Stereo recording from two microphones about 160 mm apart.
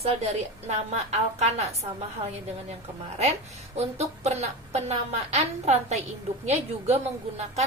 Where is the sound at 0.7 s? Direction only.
45° right (ahead or behind).